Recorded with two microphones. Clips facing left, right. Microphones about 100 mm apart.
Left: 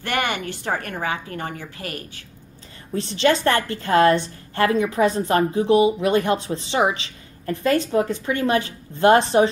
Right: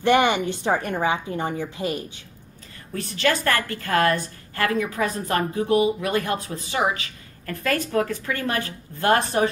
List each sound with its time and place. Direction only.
0.0 s speech: 20° right (ahead or behind)
2.9 s a woman's voice: 25° left (ahead or behind)